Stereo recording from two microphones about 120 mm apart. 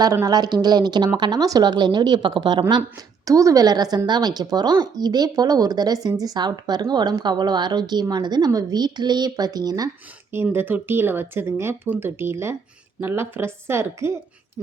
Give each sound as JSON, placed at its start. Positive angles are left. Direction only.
{"t": 0.0, "sound": "a woman's voice", "side_deg": -30}
{"t": 3.2, "sound": "a woman's voice", "side_deg": -30}
{"t": 10.3, "sound": "speech", "side_deg": -20}